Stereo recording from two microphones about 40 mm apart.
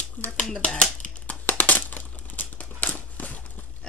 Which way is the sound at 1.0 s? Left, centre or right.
Left.